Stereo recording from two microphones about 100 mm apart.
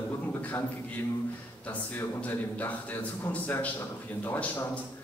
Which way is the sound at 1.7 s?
15° left (ahead or behind).